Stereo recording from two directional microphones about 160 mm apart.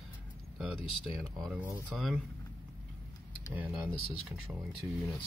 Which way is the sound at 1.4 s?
5° right (ahead or behind).